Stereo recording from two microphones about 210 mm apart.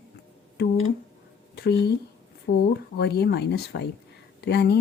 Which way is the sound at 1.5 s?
50° left (ahead or behind).